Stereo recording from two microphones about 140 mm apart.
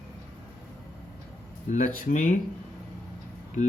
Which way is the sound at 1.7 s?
65° left (ahead or behind).